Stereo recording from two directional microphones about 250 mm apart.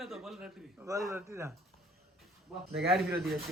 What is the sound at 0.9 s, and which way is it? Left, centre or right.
Speech, centre.